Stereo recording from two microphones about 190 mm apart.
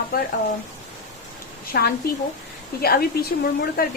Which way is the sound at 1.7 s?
50° left (ahead or behind).